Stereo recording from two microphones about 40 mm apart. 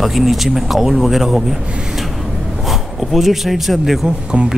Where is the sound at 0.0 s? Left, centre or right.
Centre.